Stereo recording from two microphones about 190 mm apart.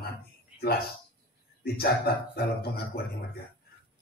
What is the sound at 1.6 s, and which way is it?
A man's voice, 55° left (ahead or behind).